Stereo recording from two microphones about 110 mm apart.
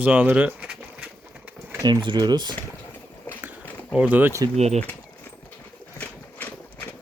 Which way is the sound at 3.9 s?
10° right (ahead or behind).